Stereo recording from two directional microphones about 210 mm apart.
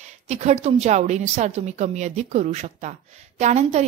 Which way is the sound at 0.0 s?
30° right (ahead or behind).